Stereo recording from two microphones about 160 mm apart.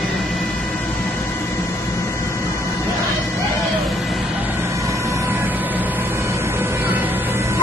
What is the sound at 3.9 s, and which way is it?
Vehicle, centre (ahead or behind).